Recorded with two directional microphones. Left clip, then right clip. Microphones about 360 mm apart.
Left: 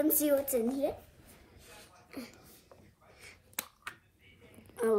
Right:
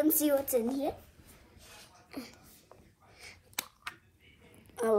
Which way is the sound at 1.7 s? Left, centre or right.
Centre.